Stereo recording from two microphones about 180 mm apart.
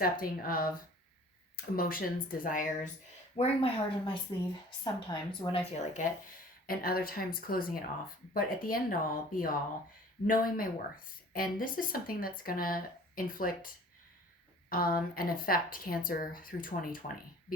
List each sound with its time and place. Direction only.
0.0 s speech: 55° left (ahead or behind)
3.3 s a woman's voice: 35° left (ahead or behind)
5.8 s speech: 45° left (ahead or behind)
6.7 s speech: 55° left (ahead or behind)
14.7 s speech: 55° left (ahead or behind)